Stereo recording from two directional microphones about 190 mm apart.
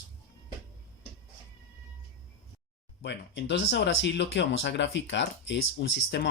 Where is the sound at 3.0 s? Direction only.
65° left (ahead or behind).